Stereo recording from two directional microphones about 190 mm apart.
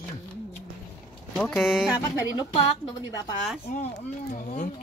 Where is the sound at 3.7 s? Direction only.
40° left (ahead or behind).